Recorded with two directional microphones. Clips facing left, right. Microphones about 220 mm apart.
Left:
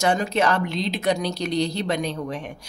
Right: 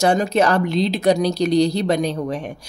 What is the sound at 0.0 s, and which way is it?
A woman's voice, 35° right (ahead or behind).